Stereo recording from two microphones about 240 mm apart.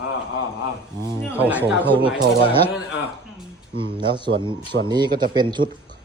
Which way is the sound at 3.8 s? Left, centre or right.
Right.